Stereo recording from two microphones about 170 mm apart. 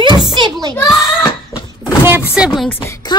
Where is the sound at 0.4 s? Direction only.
25° right (ahead or behind).